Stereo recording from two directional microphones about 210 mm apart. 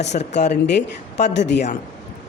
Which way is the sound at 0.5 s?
55° left (ahead or behind).